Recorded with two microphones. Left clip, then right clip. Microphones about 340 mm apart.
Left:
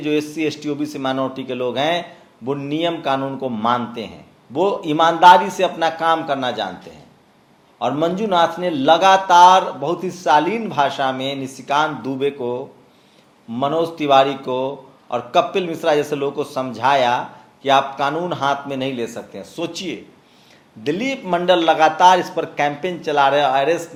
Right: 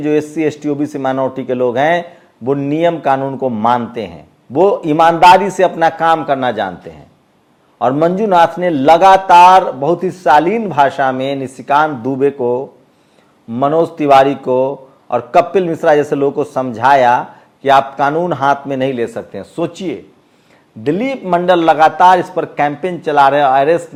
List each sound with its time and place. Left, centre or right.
0.0 s a man's voice: right
7.8 s a man's voice: right